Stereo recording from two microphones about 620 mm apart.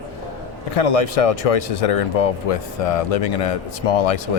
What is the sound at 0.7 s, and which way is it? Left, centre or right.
Speech, left.